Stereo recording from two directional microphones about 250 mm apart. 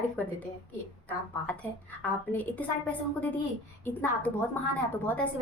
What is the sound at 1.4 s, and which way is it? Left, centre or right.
A woman's voice, centre.